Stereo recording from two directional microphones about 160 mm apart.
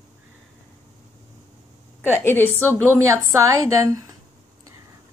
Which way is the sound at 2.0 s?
10° left (ahead or behind).